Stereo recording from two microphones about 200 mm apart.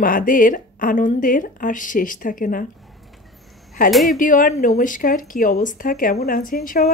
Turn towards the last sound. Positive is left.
turn(degrees=45)  # may be behind; listen again after turning